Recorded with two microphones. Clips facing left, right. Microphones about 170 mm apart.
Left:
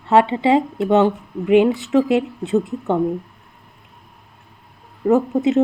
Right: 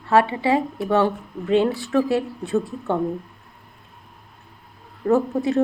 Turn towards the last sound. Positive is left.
turn(degrees=20)  # may be behind; listen again after turning